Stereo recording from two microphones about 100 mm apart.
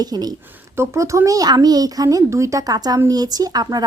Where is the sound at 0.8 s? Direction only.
30° right (ahead or behind).